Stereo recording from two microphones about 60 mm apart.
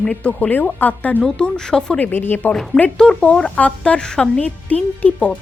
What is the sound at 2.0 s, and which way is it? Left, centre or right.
Speech, left.